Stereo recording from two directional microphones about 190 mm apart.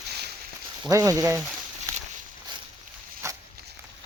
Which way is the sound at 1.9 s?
15° right (ahead or behind).